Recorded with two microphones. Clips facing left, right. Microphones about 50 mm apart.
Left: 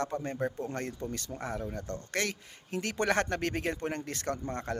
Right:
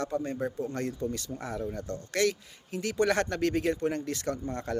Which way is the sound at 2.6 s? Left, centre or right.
Left.